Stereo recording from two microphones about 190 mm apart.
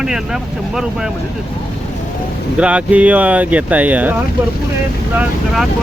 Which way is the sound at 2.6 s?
5° right (ahead or behind).